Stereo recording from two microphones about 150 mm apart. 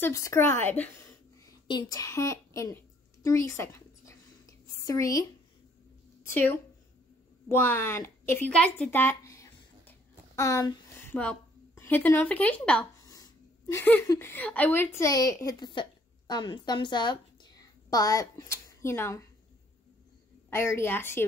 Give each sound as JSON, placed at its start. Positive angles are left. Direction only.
{"t": 0.0, "sound": "a woman's voice", "side_deg": 20}
{"t": 1.7, "sound": "a sound", "side_deg": 25}
{"t": 6.2, "sound": "a woman's voice", "side_deg": 15}
{"t": 7.4, "sound": "a sound", "side_deg": 15}
{"t": 11.7, "sound": "a woman's voice", "side_deg": 15}
{"t": 13.0, "sound": "a sound", "side_deg": 25}
{"t": 14.0, "sound": "a woman's voice", "side_deg": 20}
{"t": 15.0, "sound": "a woman's voice", "side_deg": 25}
{"t": 20.4, "sound": "a woman's voice", "side_deg": 15}